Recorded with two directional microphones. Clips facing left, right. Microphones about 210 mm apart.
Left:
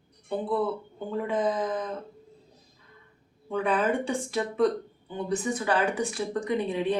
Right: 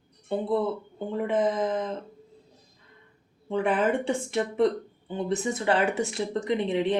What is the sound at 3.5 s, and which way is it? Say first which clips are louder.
Speech: right 1 dB; 25° right (ahead or behind).